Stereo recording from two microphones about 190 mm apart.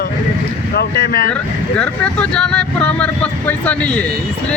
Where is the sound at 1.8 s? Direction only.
5° left (ahead or behind).